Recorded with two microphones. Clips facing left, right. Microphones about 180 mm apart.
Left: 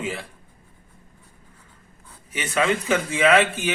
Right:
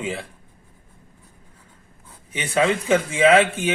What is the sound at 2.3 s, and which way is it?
A man's voice, 30° right (ahead or behind).